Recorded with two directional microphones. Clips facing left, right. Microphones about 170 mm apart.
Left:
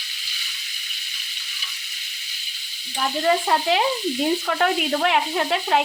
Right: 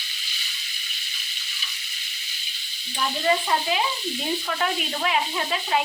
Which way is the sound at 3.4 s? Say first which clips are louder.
Left 4 dB; 60° left (ahead or behind).